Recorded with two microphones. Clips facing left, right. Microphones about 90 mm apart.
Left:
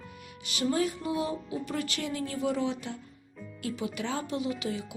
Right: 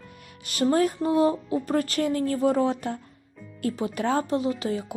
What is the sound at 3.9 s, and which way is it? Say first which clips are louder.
Music: right 8 dB; 45° right (ahead or behind).